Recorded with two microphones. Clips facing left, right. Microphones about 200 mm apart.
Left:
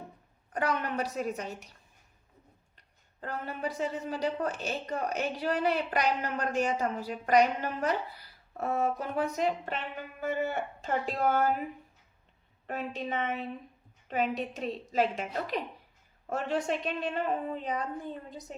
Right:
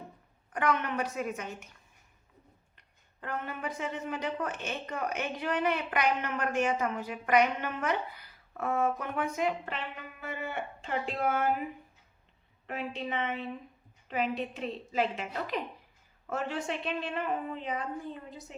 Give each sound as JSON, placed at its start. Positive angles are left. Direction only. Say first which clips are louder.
{"t": 0.5, "sound": "speech", "louder": "right 1 dB", "side_deg": 35}
{"t": 2.7, "sound": "speech", "louder": "left 3 dB", "side_deg": 35}
{"t": 12.6, "sound": "speech", "louder": "left 1 dB", "side_deg": 40}